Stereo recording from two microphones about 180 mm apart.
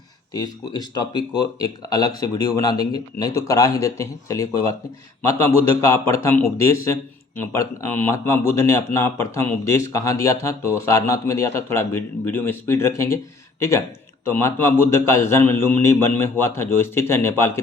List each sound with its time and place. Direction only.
0.3 s speech: 25° left (ahead or behind)
5.8 s a man's voice: 15° left (ahead or behind)